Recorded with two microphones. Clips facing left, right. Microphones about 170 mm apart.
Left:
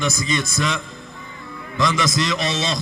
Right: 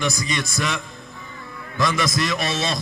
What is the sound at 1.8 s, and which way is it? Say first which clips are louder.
A man's voice: left 1 dB; 20° left (ahead or behind).